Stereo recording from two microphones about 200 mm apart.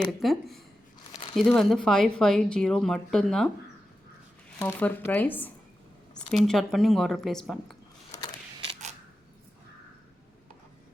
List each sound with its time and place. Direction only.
0.2 s speech: centre (ahead or behind)
1.1 s crumpling: 25° left (ahead or behind)
1.4 s speech: centre (ahead or behind)
4.6 s speech: 10° left (ahead or behind)
8.6 s camera: 35° right (ahead or behind)